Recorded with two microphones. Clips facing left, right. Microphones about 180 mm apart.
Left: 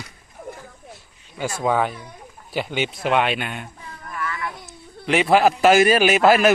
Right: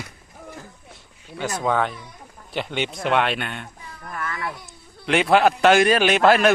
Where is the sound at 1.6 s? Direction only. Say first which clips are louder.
Left 2 dB; 10° left (ahead or behind).